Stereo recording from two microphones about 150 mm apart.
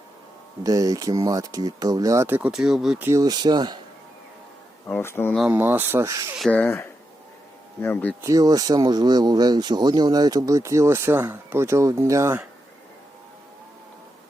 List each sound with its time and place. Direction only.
0.6 s speech: 25° right (ahead or behind)
2.5 s speech: 5° right (ahead or behind)
3.1 s speech: 25° right (ahead or behind)
4.9 s speech: 15° left (ahead or behind)
5.5 s speech: 10° right (ahead or behind)
6.4 s speech: 10° left (ahead or behind)
8.2 s speech: 25° right (ahead or behind)